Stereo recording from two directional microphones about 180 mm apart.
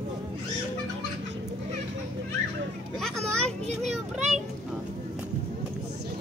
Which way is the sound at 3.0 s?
Centre (ahead or behind).